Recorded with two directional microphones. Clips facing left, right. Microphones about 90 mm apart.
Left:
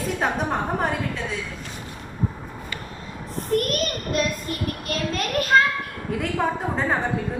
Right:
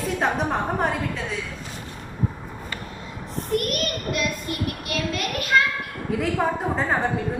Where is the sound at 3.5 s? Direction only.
40° left (ahead or behind).